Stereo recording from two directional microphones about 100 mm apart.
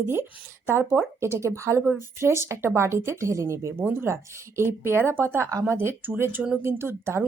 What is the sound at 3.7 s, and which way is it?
Speech, 20° right (ahead or behind).